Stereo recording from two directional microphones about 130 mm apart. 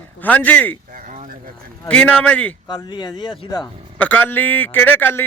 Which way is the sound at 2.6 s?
35° left (ahead or behind).